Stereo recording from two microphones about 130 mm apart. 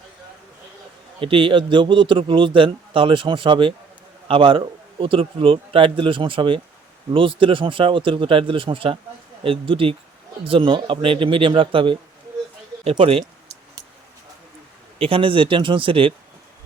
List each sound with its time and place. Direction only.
1.2 s a man's voice: 45° right (ahead or behind)
14.9 s a man's voice: 45° right (ahead or behind)